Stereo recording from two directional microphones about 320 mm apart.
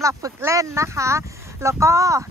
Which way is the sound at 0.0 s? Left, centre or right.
Centre.